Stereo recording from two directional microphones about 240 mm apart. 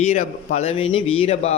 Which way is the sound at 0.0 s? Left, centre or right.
Left.